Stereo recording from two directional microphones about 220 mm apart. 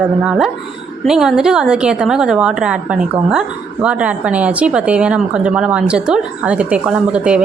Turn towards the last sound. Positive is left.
turn(degrees=-5)  # may be behind; listen again after turning